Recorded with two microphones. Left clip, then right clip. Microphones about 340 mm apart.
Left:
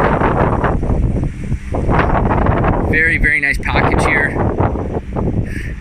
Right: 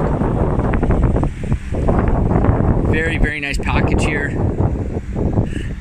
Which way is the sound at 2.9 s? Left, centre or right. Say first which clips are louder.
Left 10 dB; centre.